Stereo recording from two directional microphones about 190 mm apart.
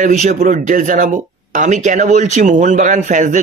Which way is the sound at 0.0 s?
40° right (ahead or behind).